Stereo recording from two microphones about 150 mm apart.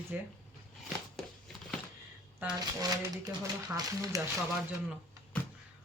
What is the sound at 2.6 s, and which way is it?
Speech, 25° right (ahead or behind).